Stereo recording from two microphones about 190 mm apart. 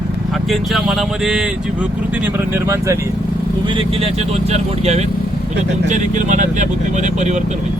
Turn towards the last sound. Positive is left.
turn(degrees=-40)  # may be behind; listen again after turning